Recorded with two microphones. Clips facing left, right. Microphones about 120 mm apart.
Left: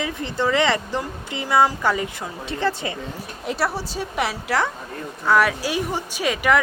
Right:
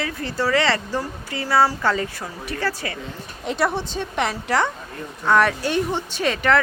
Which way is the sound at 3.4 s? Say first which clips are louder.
Right 2 dB; 5° left (ahead or behind).